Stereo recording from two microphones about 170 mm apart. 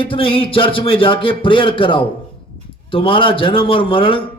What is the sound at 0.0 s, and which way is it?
A man's voice, 30° left (ahead or behind).